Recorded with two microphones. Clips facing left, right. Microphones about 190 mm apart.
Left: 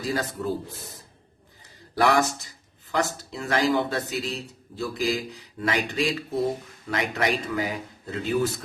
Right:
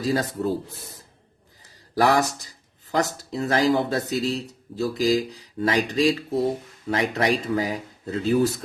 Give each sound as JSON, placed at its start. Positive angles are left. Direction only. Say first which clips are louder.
{"t": 0.1, "sound": "speech", "louder": "right 4 dB", "side_deg": -35}
{"t": 2.0, "sound": "speech", "louder": "right 1 dB", "side_deg": -35}